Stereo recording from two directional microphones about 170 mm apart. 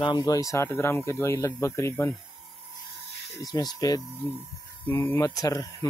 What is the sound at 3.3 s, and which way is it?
Speech, 25° left (ahead or behind).